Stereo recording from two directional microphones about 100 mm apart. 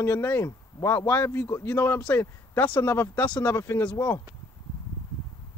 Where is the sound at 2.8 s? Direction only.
30° left (ahead or behind).